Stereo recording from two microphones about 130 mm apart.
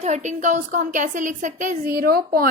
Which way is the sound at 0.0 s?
65° right (ahead or behind).